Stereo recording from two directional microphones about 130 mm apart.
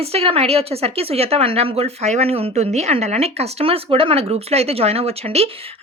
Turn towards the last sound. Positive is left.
turn(degrees=-50)  # may be behind; listen again after turning